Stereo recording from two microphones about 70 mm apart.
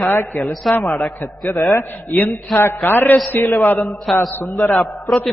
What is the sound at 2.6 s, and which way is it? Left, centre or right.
A man's voice, left.